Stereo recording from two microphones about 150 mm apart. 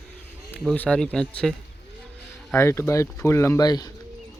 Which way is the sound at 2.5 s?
15° left (ahead or behind).